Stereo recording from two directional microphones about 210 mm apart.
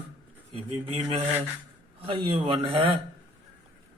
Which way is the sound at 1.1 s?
30° right (ahead or behind).